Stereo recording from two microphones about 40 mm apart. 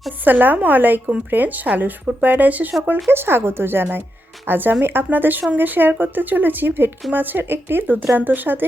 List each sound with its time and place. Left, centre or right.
0.3 s speech: right
3.1 s a woman's voice: right
5.1 s speech: right
7.1 s a woman's voice: right